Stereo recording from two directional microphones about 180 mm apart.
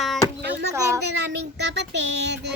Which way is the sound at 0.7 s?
20° right (ahead or behind).